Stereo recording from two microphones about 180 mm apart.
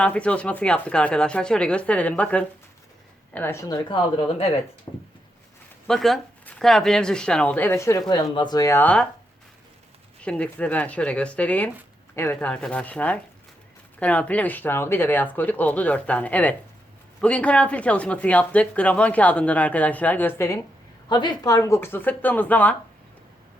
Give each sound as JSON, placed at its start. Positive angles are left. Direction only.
{"t": 0.0, "sound": "a woman's voice", "side_deg": 5}
{"t": 5.9, "sound": "a woman's voice", "side_deg": 0}
{"t": 10.2, "sound": "speech", "side_deg": 5}
{"t": 21.1, "sound": "speech", "side_deg": 25}